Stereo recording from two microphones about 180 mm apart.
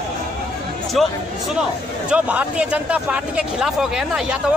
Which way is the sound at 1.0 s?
Centre (ahead or behind).